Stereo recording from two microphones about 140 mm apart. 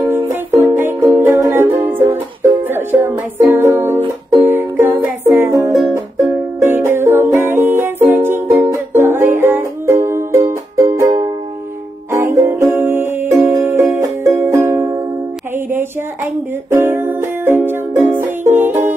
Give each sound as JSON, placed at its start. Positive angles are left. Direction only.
{"t": 0.3, "sound": "music", "side_deg": -15}